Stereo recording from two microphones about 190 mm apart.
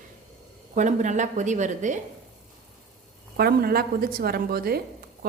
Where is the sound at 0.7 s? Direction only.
40° right (ahead or behind).